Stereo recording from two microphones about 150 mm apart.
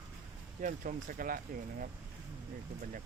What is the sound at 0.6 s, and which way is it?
Speech, 60° right (ahead or behind).